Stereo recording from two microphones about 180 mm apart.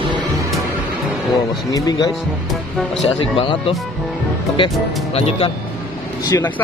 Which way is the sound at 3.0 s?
30° left (ahead or behind).